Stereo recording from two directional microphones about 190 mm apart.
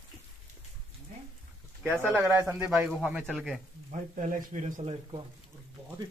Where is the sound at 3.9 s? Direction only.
40° right (ahead or behind).